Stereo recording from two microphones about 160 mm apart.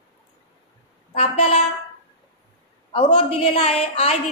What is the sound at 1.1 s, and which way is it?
Speech, 40° left (ahead or behind).